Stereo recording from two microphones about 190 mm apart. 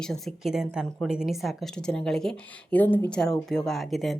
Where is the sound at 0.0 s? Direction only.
Centre (ahead or behind).